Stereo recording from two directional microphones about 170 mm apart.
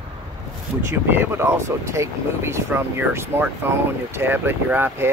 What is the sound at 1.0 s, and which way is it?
Speech, 15° right (ahead or behind).